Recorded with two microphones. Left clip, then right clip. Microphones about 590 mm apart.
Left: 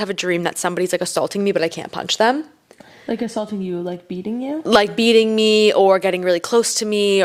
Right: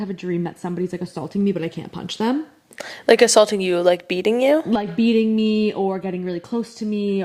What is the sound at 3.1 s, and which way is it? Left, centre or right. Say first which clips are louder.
Speech: right 12 dB; right.